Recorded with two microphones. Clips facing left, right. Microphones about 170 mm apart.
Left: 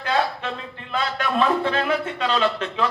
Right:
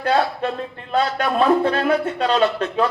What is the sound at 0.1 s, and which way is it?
A man's voice, 40° right (ahead or behind).